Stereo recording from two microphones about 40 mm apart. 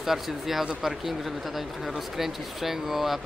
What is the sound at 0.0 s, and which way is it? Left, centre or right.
Speech, centre.